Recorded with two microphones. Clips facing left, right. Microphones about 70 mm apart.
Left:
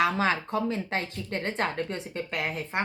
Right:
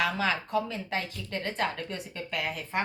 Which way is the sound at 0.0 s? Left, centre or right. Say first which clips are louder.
Left 3 dB; left.